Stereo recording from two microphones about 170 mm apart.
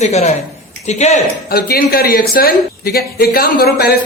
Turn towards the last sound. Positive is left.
turn(degrees=65)  # may be behind; listen again after turning